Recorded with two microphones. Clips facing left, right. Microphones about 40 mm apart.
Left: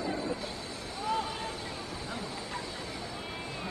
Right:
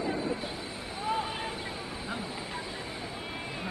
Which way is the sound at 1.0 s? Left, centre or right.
Right.